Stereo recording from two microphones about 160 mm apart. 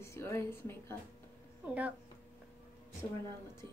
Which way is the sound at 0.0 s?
15° left (ahead or behind).